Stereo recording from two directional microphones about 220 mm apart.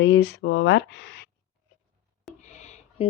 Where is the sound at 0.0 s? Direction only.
50° left (ahead or behind).